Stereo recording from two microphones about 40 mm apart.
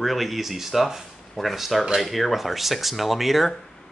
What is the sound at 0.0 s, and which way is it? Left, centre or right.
Speech, centre.